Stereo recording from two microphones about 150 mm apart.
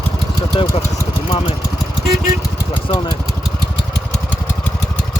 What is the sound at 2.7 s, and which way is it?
Vehicle, 35° left (ahead or behind).